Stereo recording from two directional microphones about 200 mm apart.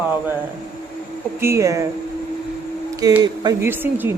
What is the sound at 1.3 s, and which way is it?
Speech, 15° right (ahead or behind).